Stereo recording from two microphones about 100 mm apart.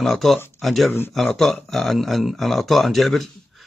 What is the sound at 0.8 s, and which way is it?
Speech, 20° left (ahead or behind).